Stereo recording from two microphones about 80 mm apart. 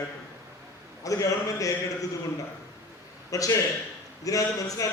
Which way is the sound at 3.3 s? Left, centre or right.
Left.